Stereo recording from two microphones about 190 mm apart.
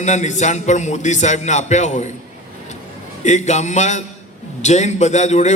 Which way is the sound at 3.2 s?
40° left (ahead or behind).